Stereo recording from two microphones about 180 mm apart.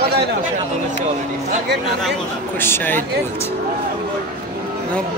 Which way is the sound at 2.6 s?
10° left (ahead or behind).